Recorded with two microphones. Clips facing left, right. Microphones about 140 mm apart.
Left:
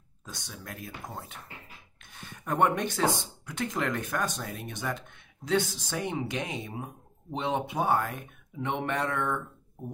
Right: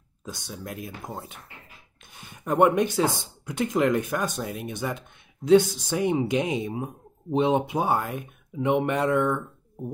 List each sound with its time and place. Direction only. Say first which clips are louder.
0.2 s speech: right 7 dB; 20° right (ahead or behind)
2.1 s a sound: right 5 dB; 10° right (ahead or behind)
3.4 s speech: right 8 dB; 15° right (ahead or behind)